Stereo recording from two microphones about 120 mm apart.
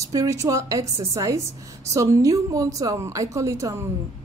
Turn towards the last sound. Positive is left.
turn(degrees=-25)  # may be behind; listen again after turning